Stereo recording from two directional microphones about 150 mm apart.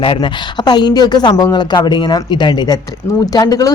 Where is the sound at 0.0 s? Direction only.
35° left (ahead or behind).